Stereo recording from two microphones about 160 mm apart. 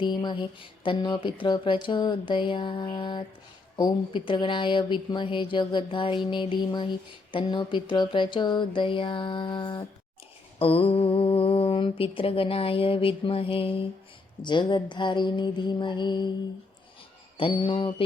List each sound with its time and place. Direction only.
0.0 s speech: 30° left (ahead or behind)
14.4 s mantra: 30° left (ahead or behind)
17.3 s speech: 30° left (ahead or behind)